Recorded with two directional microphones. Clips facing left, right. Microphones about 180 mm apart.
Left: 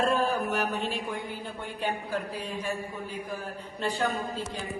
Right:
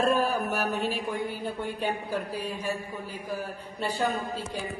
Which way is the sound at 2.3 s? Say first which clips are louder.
Right 2 dB; 10° right (ahead or behind).